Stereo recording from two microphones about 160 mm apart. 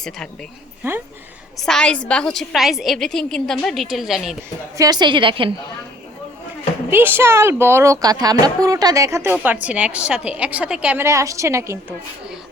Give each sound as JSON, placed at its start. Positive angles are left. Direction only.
{"t": 0.8, "sound": "speech", "side_deg": -15}
{"t": 1.5, "sound": "a woman's voice", "side_deg": 5}
{"t": 4.8, "sound": "a woman's voice", "side_deg": -25}
{"t": 6.9, "sound": "speech", "side_deg": -15}